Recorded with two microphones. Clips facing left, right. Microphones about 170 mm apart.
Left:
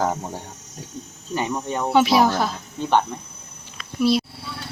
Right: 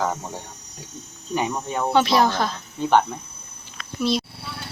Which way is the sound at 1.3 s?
15° right (ahead or behind).